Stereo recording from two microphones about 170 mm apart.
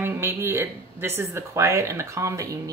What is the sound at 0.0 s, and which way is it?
Speech, 15° right (ahead or behind).